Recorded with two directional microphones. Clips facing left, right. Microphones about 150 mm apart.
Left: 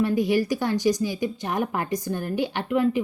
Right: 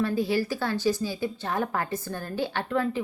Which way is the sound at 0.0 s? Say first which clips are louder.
Left 4 dB; 15° left (ahead or behind).